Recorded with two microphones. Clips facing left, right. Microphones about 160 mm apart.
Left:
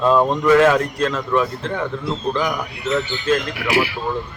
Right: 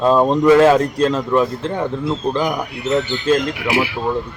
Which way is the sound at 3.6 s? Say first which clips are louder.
Right 1 dB; 20° right (ahead or behind).